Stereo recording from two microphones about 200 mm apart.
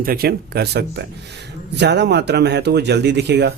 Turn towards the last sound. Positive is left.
turn(degrees=-55)  # may be behind; listen again after turning